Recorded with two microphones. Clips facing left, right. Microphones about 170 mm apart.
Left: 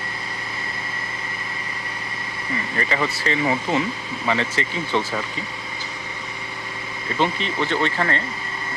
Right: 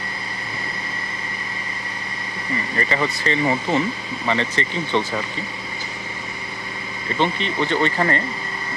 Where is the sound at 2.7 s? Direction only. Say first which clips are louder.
Right 1 dB; centre (ahead or behind).